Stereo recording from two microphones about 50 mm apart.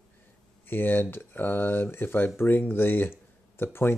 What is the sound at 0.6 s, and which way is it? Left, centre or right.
Speech, left.